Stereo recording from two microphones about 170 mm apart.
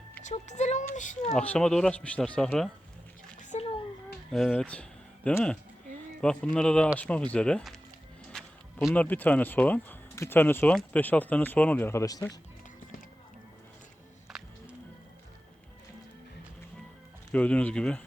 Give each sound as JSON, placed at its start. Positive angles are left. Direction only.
{"t": 0.3, "sound": "speech", "side_deg": 45}
{"t": 1.3, "sound": "speech", "side_deg": 5}
{"t": 3.3, "sound": "bathtub", "side_deg": 45}
{"t": 4.3, "sound": "speech", "side_deg": 0}
{"t": 8.3, "sound": "a sound", "side_deg": 0}
{"t": 9.0, "sound": "speech", "side_deg": 10}
{"t": 14.3, "sound": "music", "side_deg": -5}
{"t": 17.3, "sound": "speech", "side_deg": 10}